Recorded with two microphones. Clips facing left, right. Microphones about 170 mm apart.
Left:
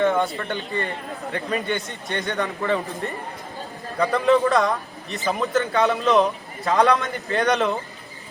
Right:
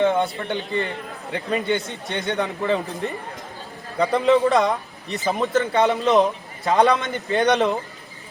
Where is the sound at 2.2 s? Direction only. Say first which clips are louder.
Right 2 dB; 20° right (ahead or behind).